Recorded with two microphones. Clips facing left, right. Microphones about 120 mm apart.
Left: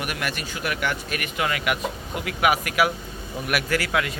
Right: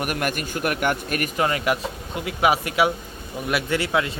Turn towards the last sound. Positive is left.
turn(degrees=-25)  # may be behind; listen again after turning